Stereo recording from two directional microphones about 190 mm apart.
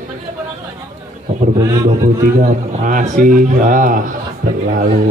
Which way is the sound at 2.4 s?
40° right (ahead or behind).